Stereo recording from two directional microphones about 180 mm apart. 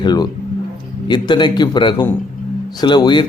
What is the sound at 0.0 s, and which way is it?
Speech, 25° left (ahead or behind).